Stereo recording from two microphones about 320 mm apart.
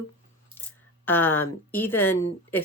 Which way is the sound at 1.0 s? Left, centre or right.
Centre.